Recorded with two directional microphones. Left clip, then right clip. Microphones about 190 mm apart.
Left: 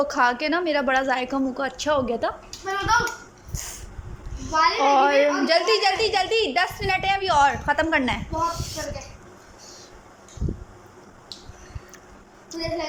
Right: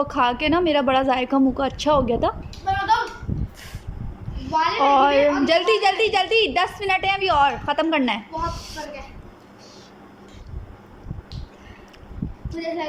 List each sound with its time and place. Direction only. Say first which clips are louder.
0.0 s a woman's voice: right 1 dB; 15° right (ahead or behind)
4.4 s a woman's voice: even; 10° right (ahead or behind)
12.5 s speech: right 1 dB; 15° right (ahead or behind)